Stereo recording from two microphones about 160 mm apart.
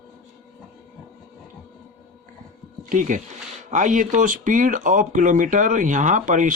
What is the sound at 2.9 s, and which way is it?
Speech, 55° right (ahead or behind).